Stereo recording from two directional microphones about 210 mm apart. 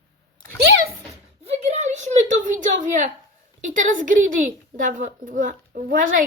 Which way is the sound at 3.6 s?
35° right (ahead or behind).